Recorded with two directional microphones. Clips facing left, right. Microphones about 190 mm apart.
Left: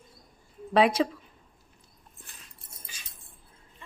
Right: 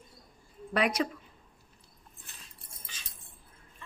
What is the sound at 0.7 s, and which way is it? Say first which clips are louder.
Speech: left 7 dB; 30° left (ahead or behind).